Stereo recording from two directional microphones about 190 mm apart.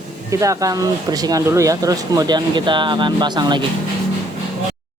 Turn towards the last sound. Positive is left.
turn(degrees=-25)  # may be behind; listen again after turning